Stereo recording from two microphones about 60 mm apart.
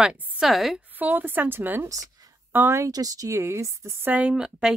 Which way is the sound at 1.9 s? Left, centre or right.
Right.